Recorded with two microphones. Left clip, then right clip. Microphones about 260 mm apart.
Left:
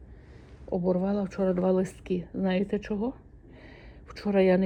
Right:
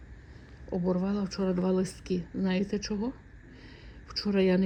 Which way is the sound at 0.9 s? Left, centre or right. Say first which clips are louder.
Left 4 dB; left.